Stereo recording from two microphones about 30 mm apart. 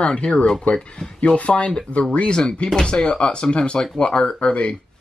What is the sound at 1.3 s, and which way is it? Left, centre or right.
Speech, left.